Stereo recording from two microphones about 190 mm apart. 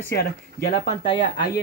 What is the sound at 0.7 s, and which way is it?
Speech, 25° left (ahead or behind).